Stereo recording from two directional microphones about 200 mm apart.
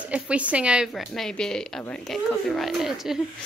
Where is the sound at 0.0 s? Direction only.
5° right (ahead or behind).